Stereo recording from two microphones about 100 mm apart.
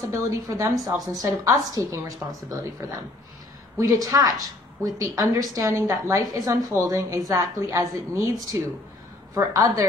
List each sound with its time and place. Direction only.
0.1 s a woman's voice: 30° right (ahead or behind)